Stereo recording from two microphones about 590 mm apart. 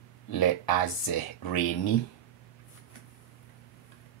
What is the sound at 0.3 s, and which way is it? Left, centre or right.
Speech, left.